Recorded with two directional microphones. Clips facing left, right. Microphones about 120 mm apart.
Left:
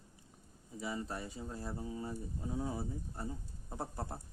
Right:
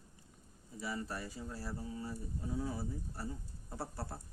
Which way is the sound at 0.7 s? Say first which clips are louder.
Left 1 dB; 20° left (ahead or behind).